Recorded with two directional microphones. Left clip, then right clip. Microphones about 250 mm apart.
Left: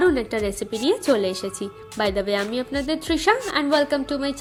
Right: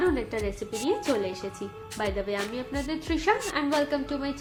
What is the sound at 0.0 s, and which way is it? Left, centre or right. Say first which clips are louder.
A woman's voice: left 7 dB; left.